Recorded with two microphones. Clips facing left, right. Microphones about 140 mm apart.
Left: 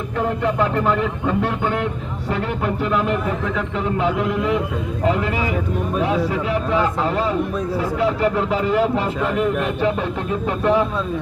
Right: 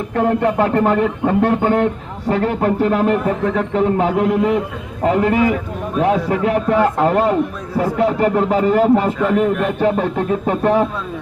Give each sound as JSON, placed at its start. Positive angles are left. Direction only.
{"t": 0.2, "sound": "speech", "side_deg": -50}